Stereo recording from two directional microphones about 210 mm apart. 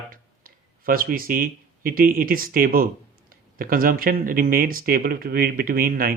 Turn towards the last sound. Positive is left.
turn(degrees=-45)  # may be behind; listen again after turning